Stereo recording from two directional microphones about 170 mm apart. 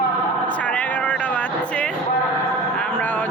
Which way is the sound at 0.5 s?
10° left (ahead or behind).